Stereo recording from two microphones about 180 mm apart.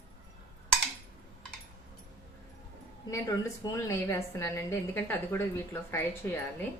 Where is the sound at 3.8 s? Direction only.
15° left (ahead or behind).